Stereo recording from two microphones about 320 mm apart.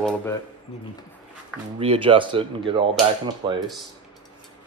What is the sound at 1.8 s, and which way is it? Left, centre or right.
Speech, centre.